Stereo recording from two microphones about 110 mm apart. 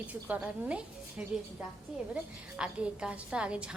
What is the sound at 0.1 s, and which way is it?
A woman's voice, 10° right (ahead or behind).